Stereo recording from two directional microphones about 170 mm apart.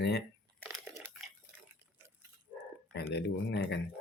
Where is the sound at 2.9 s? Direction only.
80° left.